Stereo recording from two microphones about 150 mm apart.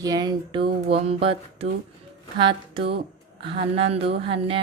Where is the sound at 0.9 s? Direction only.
40° right (ahead or behind).